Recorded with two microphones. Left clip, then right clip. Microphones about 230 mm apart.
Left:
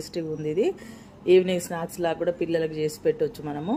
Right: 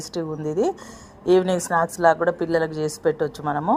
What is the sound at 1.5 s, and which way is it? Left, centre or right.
Speech, centre.